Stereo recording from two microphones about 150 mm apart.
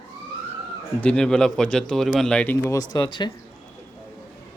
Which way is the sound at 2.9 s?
30° left (ahead or behind).